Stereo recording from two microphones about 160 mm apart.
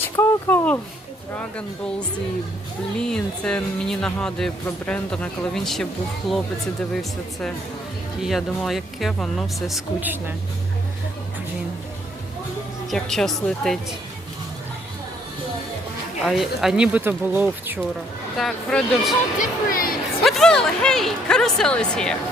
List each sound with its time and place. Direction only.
0.2 s a sound: 10° left (ahead or behind)
2.9 s speech: 5° left (ahead or behind)
8.2 s speech: centre (ahead or behind)
10.0 s speech: 10° right (ahead or behind)
12.9 s speech: centre (ahead or behind)
16.2 s speech: centre (ahead or behind)
18.3 s speech: 5° left (ahead or behind)
19.4 s speech: 65° left (ahead or behind)
20.2 s speech: centre (ahead or behind)